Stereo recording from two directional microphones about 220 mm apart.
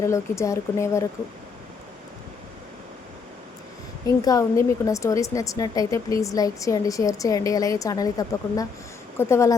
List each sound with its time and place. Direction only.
0.0 s a woman's voice: 15° left (ahead or behind)
4.2 s a woman's voice: 15° left (ahead or behind)